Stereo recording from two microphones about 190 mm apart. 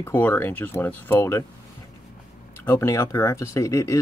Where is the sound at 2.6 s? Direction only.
15° left (ahead or behind).